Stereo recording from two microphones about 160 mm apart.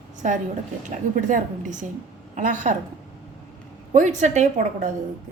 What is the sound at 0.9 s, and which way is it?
A woman's voice, 55° right (ahead or behind).